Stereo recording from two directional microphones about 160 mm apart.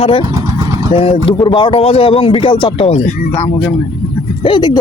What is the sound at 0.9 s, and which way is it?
Speech, 35° left (ahead or behind).